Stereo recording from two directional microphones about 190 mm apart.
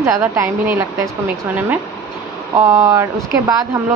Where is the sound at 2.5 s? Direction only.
15° right (ahead or behind).